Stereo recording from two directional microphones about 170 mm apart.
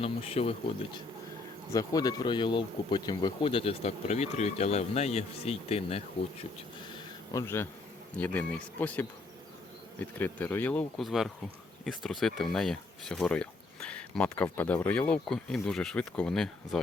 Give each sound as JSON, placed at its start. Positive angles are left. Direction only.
{"t": 0.0, "sound": "speech", "side_deg": 35}
{"t": 1.7, "sound": "speech", "side_deg": 20}
{"t": 7.3, "sound": "speech", "side_deg": 15}